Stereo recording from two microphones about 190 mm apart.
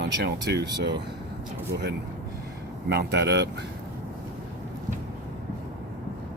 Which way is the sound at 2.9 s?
60° right (ahead or behind).